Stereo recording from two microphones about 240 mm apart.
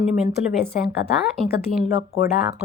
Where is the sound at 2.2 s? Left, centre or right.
Left.